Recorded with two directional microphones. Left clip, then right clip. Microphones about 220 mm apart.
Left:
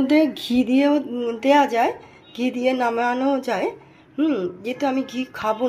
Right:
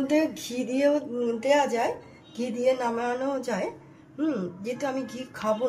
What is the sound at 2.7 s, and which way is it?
A woman's voice, 20° left (ahead or behind).